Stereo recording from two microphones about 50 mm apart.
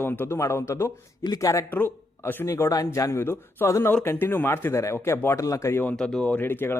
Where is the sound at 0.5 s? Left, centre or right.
Left.